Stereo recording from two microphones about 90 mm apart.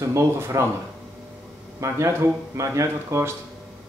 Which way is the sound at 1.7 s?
35° right (ahead or behind).